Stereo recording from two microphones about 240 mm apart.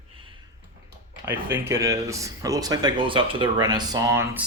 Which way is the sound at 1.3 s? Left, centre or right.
Centre.